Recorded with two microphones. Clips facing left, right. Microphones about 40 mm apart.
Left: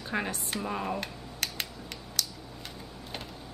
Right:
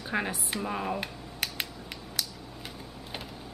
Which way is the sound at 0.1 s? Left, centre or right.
Centre.